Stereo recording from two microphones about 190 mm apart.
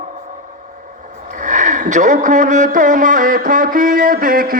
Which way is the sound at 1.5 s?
40° right (ahead or behind).